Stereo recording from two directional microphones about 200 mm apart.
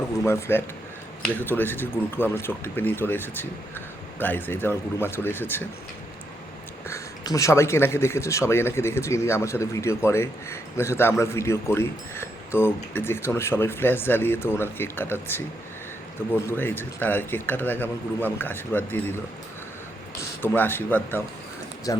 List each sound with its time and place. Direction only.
0.3 s a man's voice: 10° left (ahead or behind)
6.8 s a man's voice: 15° left (ahead or behind)
20.1 s a man's voice: 10° left (ahead or behind)